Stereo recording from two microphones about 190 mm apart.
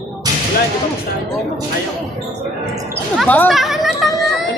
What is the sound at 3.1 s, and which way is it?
Speech, 5° left (ahead or behind).